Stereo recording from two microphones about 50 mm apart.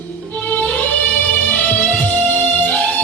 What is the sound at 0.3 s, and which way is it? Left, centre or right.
Music, left.